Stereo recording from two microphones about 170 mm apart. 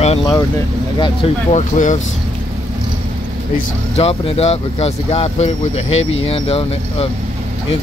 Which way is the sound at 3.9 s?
35° left (ahead or behind).